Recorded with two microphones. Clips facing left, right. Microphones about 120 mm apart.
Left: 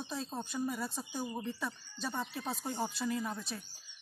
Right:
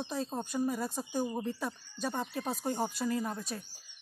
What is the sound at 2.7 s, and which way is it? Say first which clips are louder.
Speech: right 3 dB; 40° right (ahead or behind).